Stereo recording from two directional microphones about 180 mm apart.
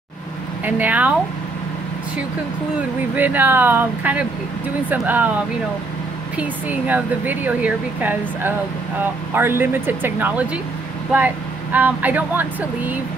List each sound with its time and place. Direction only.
0.7 s speech: 10° right (ahead or behind)
3.2 s speech: 10° right (ahead or behind)
6.3 s speech: 10° right (ahead or behind)